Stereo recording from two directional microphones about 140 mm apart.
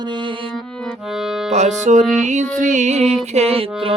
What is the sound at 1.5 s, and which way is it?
Speech, 55° right (ahead or behind).